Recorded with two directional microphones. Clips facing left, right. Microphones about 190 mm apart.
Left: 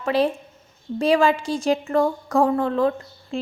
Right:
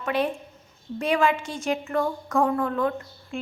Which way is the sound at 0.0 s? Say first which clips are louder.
Left 5 dB; 35° left (ahead or behind).